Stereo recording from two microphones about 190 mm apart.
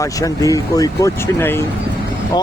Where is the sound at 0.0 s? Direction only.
15° left (ahead or behind).